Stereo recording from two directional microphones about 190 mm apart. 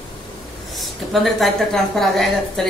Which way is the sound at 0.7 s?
Centre (ahead or behind).